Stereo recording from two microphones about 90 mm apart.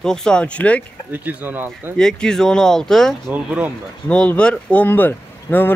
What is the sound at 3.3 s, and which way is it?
Speech, 15° right (ahead or behind).